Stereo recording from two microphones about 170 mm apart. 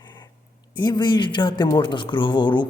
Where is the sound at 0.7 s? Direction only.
25° left (ahead or behind).